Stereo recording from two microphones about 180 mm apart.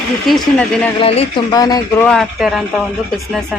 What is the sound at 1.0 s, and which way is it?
Speech, 35° left (ahead or behind).